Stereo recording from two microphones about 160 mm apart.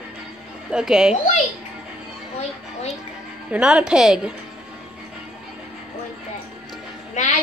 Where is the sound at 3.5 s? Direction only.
5° right (ahead or behind).